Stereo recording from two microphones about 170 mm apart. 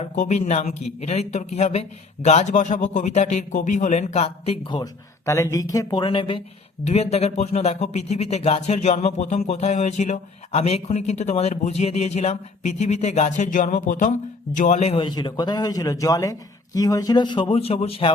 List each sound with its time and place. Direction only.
0.0 s a man's voice: 45° left (ahead or behind)
4.7 s a man's voice: 20° left (ahead or behind); by 18.1 s 35° left (ahead or behind)